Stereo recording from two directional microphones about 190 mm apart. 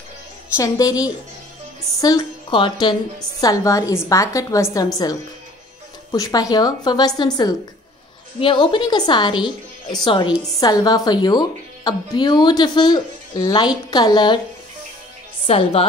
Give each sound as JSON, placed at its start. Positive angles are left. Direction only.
{"t": 0.6, "sound": "a woman's voice", "side_deg": 20}
{"t": 15.4, "sound": "a woman's voice", "side_deg": 30}